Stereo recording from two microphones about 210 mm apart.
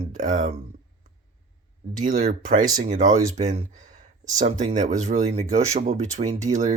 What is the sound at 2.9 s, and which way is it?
Speech, 35° right (ahead or behind).